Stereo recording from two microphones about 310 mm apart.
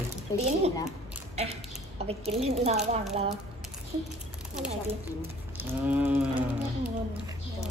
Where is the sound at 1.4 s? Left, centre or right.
Centre.